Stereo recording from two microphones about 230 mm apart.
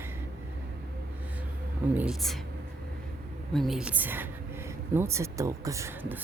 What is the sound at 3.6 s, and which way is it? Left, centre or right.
Speech, centre.